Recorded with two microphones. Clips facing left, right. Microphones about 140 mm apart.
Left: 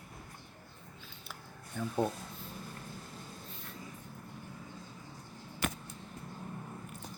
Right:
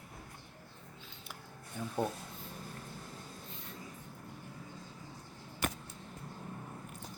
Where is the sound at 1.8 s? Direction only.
15° right (ahead or behind).